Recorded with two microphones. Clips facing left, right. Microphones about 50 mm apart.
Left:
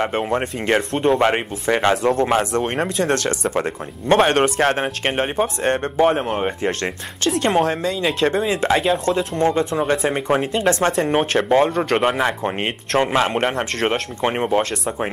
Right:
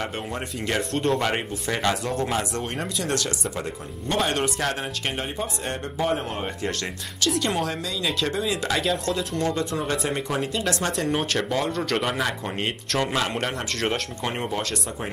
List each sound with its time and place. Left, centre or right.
0.0 s speech: left
0.9 s speech: left